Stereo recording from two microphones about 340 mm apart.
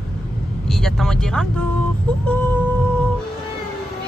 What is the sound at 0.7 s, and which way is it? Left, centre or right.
Speech, centre.